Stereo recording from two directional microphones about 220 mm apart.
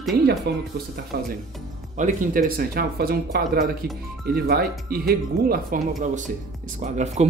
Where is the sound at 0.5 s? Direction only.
50° right (ahead or behind).